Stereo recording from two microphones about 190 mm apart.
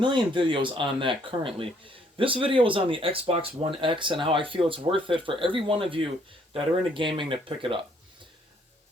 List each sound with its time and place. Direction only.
0.0 s speech: 25° right (ahead or behind)